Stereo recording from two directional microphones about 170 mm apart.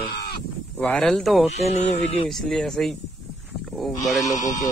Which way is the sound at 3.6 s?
Centre (ahead or behind).